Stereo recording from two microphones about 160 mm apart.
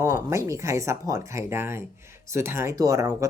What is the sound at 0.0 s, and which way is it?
Speech, 20° right (ahead or behind).